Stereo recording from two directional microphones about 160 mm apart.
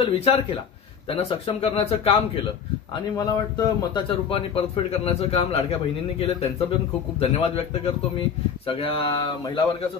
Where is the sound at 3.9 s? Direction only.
35° left (ahead or behind).